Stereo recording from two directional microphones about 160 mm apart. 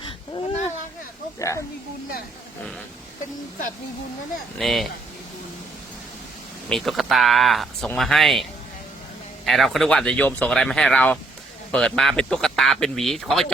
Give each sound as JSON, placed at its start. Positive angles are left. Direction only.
{"t": 1.4, "sound": "speech", "side_deg": 20}
{"t": 4.5, "sound": "a man's voice", "side_deg": 0}
{"t": 6.7, "sound": "a man's voice", "side_deg": 0}
{"t": 9.5, "sound": "a man's voice", "side_deg": 0}